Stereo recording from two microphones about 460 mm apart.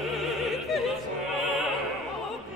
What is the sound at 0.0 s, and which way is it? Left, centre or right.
Opera, centre.